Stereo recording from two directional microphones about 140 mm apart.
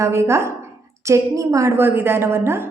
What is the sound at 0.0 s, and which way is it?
A woman's voice, 20° right (ahead or behind).